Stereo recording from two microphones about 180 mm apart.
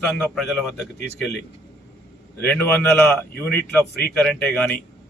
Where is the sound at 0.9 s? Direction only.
65° left (ahead or behind).